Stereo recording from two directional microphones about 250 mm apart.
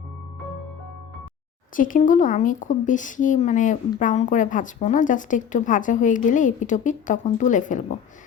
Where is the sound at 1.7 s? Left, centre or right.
Left.